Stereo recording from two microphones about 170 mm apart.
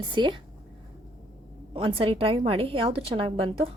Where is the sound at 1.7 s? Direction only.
30° right (ahead or behind).